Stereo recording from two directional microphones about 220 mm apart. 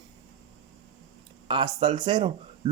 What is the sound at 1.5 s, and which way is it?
Speech, 25° right (ahead or behind).